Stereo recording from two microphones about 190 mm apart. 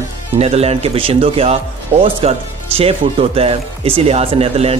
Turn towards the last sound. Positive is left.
turn(degrees=-30)  # may be behind; listen again after turning